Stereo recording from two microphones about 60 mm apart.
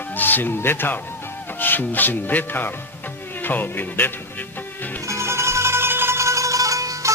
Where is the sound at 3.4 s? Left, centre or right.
Left.